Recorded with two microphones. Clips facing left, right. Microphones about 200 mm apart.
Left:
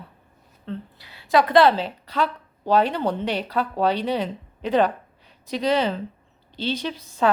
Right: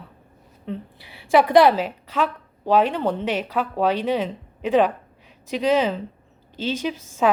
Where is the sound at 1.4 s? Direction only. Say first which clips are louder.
Right 1 dB; 15° right (ahead or behind).